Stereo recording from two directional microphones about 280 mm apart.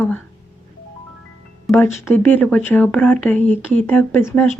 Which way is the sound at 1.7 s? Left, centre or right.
Centre.